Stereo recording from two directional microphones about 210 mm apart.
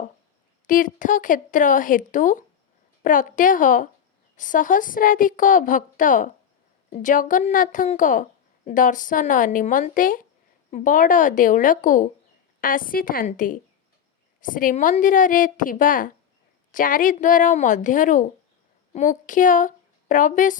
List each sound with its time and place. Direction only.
0.7 s a woman's voice: 40° left (ahead or behind)